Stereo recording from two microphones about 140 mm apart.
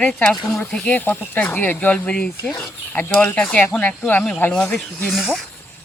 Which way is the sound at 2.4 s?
20° left (ahead or behind).